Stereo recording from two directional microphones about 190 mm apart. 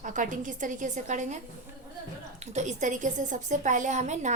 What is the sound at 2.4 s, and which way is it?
A woman's voice, 40° right (ahead or behind).